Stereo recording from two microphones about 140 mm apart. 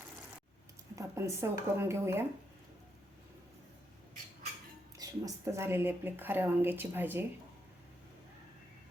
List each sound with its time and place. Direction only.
0.9 s speech: 20° right (ahead or behind)
4.9 s speech: 20° right (ahead or behind)